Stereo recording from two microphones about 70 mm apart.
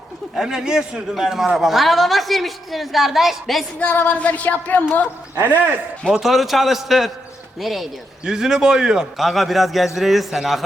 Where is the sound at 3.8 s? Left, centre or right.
Left.